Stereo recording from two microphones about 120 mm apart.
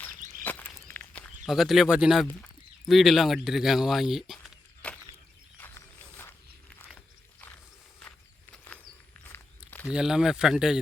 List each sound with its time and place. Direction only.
0.4 s walk: 15° left (ahead or behind)
1.5 s speech: centre (ahead or behind)
2.2 s speech: 5° left (ahead or behind)
4.8 s a sound: 10° left (ahead or behind)
5.5 s walk: 20° left (ahead or behind)
8.5 s a sound: 10° left (ahead or behind)
9.9 s speech: 5° right (ahead or behind)